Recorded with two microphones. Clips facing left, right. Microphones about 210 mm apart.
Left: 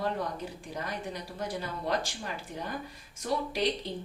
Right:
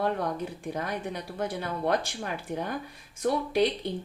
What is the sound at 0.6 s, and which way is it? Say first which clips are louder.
A woman's voice: right 4 dB; 60° right (ahead or behind).